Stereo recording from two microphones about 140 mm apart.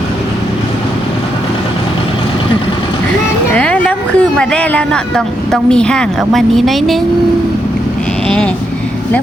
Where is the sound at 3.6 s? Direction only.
10° left (ahead or behind).